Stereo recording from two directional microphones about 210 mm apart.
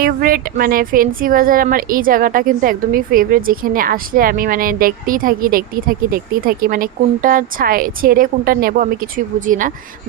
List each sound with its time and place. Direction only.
0.0 s speech: 45° right (ahead or behind)